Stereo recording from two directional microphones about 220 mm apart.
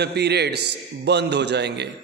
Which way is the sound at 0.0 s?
50° right (ahead or behind).